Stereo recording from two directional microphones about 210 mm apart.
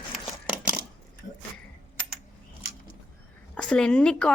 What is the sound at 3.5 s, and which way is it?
Speech, 5° left (ahead or behind).